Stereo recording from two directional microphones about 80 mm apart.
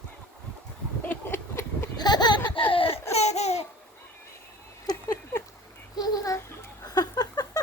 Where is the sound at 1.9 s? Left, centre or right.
Left.